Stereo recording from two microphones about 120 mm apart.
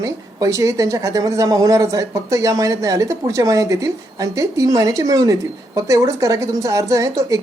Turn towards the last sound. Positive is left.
turn(degrees=-30)  # may be behind; listen again after turning